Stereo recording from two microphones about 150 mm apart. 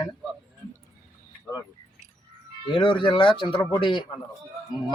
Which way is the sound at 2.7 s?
30° left (ahead or behind).